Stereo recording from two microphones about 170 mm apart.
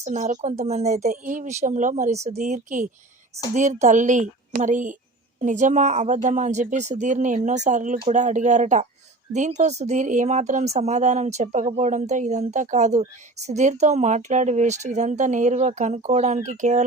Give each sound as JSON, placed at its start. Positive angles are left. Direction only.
{"t": 0.0, "sound": "a woman's voice", "side_deg": -45}